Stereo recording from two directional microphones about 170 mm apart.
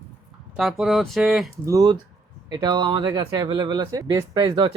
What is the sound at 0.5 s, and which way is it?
Speech, centre (ahead or behind).